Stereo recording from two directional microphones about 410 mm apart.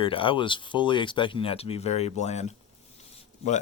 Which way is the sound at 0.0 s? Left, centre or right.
Centre.